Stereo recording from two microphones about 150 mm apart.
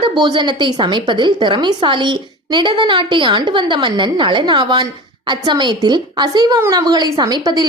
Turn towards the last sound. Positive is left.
turn(degrees=-25)  # may be behind; listen again after turning